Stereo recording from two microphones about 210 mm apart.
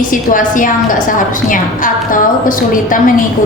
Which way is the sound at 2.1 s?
40° left (ahead or behind).